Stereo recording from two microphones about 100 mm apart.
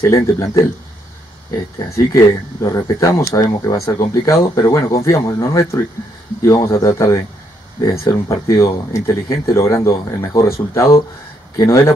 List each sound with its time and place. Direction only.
0.1 s speech: 35° left (ahead or behind)
2.1 s speech: 30° left (ahead or behind)